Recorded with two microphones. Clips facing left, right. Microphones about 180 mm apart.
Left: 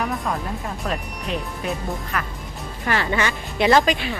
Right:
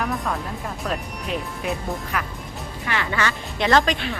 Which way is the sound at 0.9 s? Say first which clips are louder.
Even; centre (ahead or behind).